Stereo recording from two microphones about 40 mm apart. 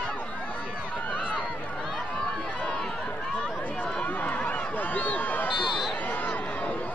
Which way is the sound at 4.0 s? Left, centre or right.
Left.